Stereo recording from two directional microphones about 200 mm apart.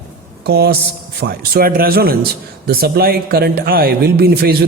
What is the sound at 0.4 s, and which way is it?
A man's voice, 55° right (ahead or behind).